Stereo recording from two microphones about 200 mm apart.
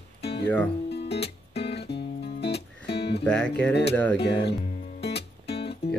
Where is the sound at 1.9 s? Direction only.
55° left (ahead or behind).